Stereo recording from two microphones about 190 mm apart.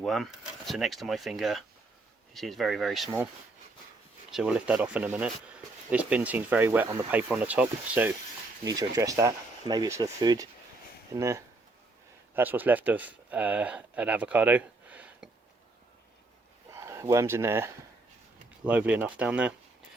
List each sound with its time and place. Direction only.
0.0 s speech: centre (ahead or behind)
4.3 s speech: 5° right (ahead or behind)
8.6 s speech: 20° right (ahead or behind)
16.7 s speech: 15° right (ahead or behind)